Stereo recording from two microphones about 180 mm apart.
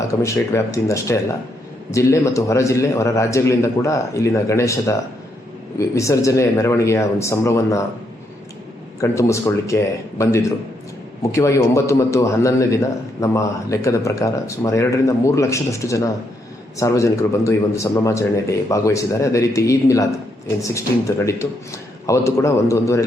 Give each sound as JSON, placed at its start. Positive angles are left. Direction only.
{"t": 0.2, "sound": "a man's voice", "side_deg": 15}
{"t": 9.0, "sound": "a man's voice", "side_deg": 15}
{"t": 21.2, "sound": "a man's voice", "side_deg": 15}